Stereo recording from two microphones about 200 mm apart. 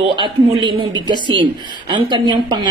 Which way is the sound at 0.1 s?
25° right (ahead or behind).